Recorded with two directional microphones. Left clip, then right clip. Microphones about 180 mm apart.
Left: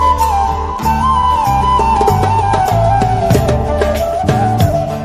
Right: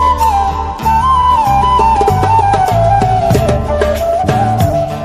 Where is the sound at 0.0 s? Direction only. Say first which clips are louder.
Right 1 dB; centre (ahead or behind).